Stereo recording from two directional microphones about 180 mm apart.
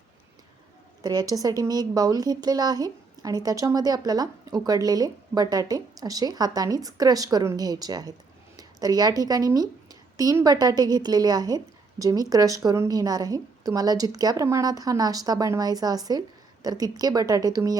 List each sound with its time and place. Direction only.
1.0 s a woman's voice: 20° right (ahead or behind)